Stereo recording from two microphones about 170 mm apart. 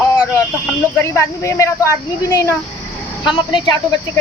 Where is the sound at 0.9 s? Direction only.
15° left (ahead or behind).